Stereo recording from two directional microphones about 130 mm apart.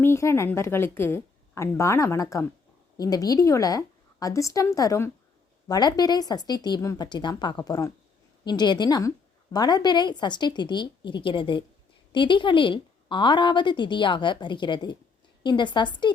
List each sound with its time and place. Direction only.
0.0 s a woman's voice: 20° left (ahead or behind); by 16.1 s 35° left (ahead or behind)